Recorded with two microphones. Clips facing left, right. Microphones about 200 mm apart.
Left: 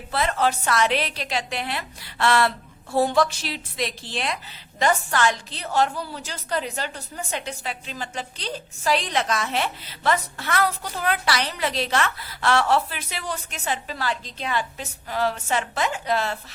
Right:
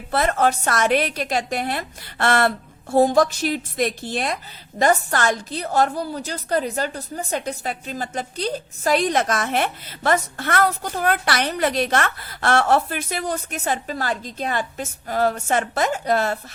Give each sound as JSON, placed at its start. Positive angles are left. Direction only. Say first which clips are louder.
{"t": 0.1, "sound": "a woman's voice", "louder": "right 4 dB", "side_deg": -50}